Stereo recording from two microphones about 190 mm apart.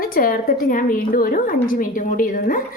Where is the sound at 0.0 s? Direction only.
50° left (ahead or behind).